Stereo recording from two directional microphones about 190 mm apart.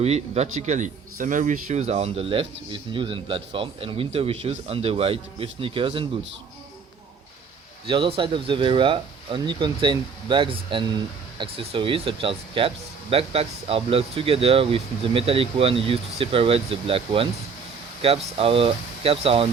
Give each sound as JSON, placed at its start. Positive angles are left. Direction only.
{"t": 0.0, "sound": "speech", "side_deg": -35}
{"t": 7.9, "sound": "speech", "side_deg": -25}